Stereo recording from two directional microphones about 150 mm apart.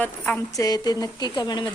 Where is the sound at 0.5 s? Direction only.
25° left (ahead or behind).